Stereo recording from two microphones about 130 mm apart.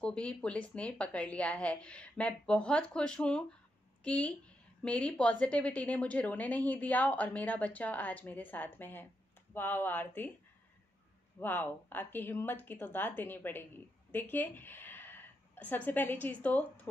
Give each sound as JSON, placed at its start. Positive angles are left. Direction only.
{"t": 0.0, "sound": "a woman's voice", "side_deg": 10}
{"t": 11.3, "sound": "a woman's voice", "side_deg": 15}